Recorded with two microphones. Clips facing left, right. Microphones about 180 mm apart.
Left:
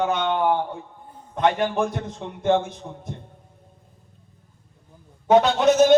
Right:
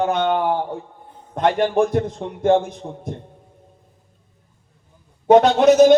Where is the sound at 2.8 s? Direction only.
30° right (ahead or behind).